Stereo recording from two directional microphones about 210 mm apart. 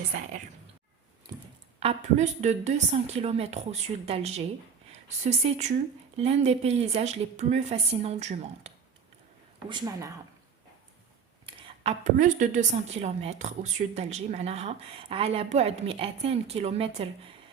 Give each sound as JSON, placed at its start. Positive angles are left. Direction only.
{"t": 0.1, "sound": "a woman's voice", "side_deg": -35}
{"t": 1.3, "sound": "a sound", "side_deg": -20}
{"t": 1.8, "sound": "a woman's voice", "side_deg": -30}
{"t": 9.6, "sound": "speech", "side_deg": -20}
{"t": 11.4, "sound": "a woman's voice", "side_deg": -30}